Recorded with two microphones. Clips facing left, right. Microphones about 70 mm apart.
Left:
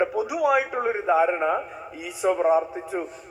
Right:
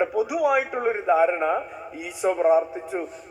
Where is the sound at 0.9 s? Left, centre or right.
Centre.